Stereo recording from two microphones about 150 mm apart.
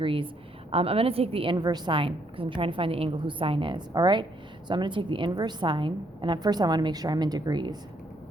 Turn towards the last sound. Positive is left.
turn(degrees=-25)  # may be behind; listen again after turning